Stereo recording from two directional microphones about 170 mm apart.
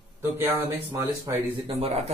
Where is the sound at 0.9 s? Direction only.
15° right (ahead or behind).